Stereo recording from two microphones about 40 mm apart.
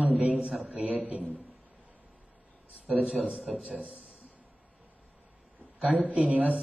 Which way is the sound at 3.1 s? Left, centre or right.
Right.